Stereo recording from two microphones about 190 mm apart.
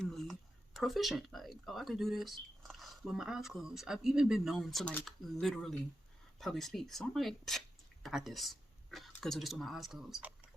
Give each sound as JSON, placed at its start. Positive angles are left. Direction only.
{"t": 0.0, "sound": "speech", "side_deg": 0}